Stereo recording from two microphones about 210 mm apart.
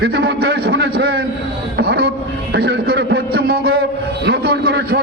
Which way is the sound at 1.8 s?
50° right (ahead or behind).